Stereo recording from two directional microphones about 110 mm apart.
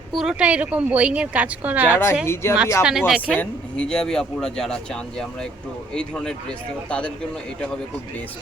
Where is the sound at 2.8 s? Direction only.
5° right (ahead or behind).